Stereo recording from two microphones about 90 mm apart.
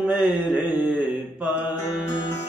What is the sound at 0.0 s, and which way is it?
Mantra, 5° right (ahead or behind).